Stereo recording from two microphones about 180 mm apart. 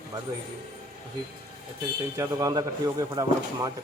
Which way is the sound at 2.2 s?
20° right (ahead or behind).